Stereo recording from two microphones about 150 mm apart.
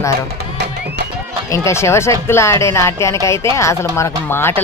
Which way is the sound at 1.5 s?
20° left (ahead or behind).